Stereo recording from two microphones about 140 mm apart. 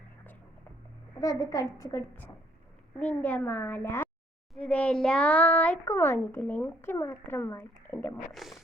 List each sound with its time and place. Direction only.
1.2 s a woman's voice: 25° left (ahead or behind)
8.3 s speech: centre (ahead or behind)